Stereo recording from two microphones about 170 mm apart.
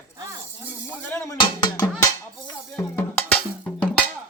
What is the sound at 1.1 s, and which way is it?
Speech, 15° left (ahead or behind).